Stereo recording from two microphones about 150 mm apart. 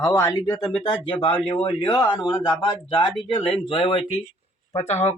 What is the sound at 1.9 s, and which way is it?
Speech, 30° left (ahead or behind).